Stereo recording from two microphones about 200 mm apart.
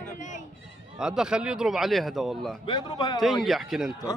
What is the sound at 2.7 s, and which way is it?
Speech, 20° left (ahead or behind).